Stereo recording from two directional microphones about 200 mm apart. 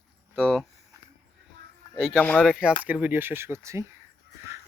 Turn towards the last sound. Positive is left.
turn(degrees=-15)  # may be behind; listen again after turning